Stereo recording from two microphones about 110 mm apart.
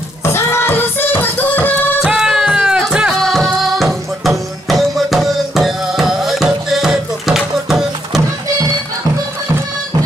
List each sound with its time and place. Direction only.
0.2 s music: 25° left (ahead or behind)
2.0 s music: 5° right (ahead or behind)